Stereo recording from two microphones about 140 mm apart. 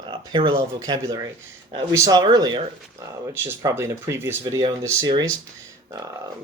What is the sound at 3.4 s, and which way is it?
Speech, 20° right (ahead or behind).